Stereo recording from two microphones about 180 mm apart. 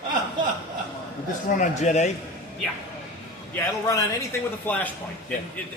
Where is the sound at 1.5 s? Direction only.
40° left (ahead or behind).